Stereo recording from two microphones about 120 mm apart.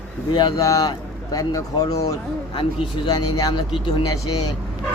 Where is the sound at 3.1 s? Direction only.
30° left (ahead or behind).